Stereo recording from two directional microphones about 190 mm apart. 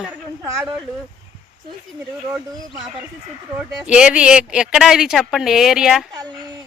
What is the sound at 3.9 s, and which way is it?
Speech, 5° right (ahead or behind).